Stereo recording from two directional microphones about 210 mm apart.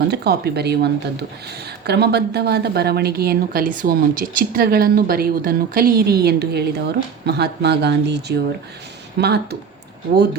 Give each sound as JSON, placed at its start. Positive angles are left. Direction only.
{"t": 0.1, "sound": "speech", "side_deg": -50}